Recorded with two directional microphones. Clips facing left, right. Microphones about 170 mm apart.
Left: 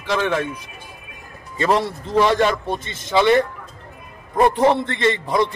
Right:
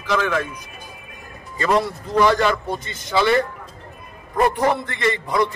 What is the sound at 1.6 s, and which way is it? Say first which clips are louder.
A man's voice: left 1 dB; 25° left (ahead or behind).